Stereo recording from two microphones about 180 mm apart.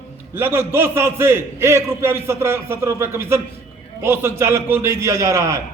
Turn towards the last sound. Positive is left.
turn(degrees=-15)  # may be behind; listen again after turning